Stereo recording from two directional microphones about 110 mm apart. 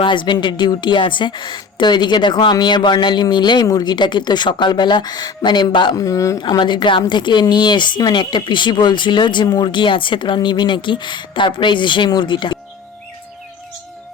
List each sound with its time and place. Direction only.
0.0 s a woman's voice: 45° left (ahead or behind)
6.0 s speech: 30° left (ahead or behind)
6.4 s a woman's voice: 45° left (ahead or behind)